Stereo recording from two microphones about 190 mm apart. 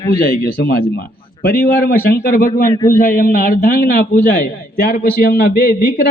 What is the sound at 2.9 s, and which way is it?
A man's voice, 50° left (ahead or behind).